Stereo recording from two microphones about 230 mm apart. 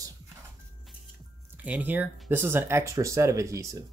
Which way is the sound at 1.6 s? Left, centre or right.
Centre.